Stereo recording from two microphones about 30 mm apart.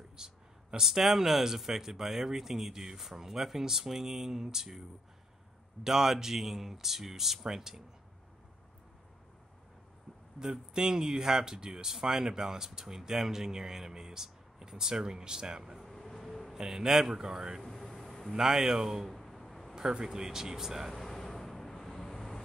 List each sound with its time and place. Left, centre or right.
0.1 s speech: right
5.9 s speech: centre
10.4 s speech: right
15.9 s vehicle: centre
16.5 s speech: centre
17.2 s speech: right
17.6 s vehicle: centre
18.3 s speech: centre
19.0 s a sound: centre
19.9 s speech: right
20.2 s speech: centre
20.9 s vehicle: centre